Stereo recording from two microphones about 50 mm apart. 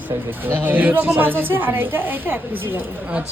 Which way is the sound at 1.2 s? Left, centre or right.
Right.